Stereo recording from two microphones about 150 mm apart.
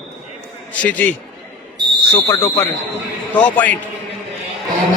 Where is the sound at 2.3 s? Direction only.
20° left (ahead or behind).